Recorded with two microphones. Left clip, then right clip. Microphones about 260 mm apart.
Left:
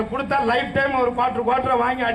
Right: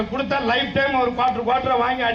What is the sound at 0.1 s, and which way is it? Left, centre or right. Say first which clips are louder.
A man's voice: left 1 dB; left.